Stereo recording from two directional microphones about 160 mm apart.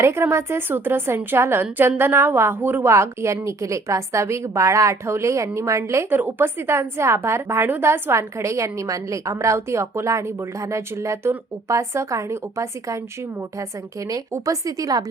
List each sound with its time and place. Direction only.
0.0 s a woman's voice: 15° right (ahead or behind)
14.1 s speech: 20° right (ahead or behind)